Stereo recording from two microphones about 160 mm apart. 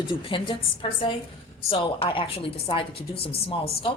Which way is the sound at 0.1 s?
30° left (ahead or behind).